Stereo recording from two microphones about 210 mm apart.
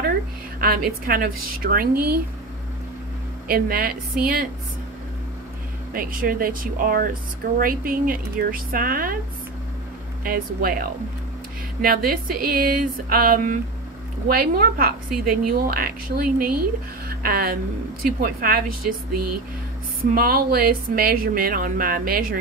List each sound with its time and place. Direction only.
0.6 s a woman's voice: 45° right (ahead or behind)
3.4 s a woman's voice: 45° right (ahead or behind)
5.9 s a woman's voice: 40° right (ahead or behind)
10.2 s a woman's voice: 45° right (ahead or behind)
20.2 s a woman's voice: 45° right (ahead or behind)